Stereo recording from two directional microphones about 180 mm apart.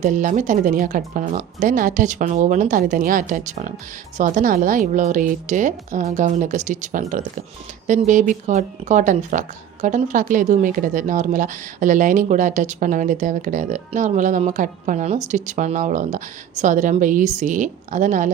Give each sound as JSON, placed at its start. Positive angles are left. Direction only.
{"t": 0.0, "sound": "speech", "side_deg": -45}